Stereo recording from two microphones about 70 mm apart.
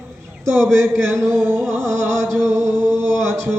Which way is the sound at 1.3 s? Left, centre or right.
Right.